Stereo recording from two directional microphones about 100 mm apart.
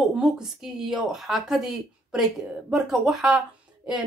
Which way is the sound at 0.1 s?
5° right (ahead or behind).